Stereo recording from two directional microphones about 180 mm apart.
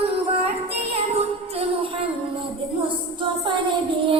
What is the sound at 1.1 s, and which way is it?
Music, 35° right (ahead or behind).